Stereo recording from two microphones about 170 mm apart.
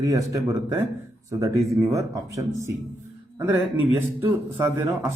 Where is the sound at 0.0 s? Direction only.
20° right (ahead or behind).